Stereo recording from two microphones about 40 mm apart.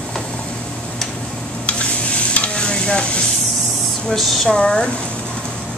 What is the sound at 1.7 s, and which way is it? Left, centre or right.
Stir, left.